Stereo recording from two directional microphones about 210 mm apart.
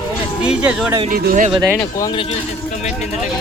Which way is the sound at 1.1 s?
45° right (ahead or behind).